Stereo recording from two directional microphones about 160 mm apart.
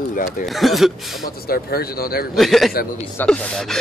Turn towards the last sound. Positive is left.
turn(degrees=5)  # may be behind; listen again after turning